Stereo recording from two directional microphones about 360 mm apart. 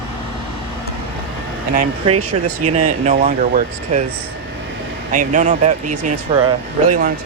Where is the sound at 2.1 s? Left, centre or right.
Right.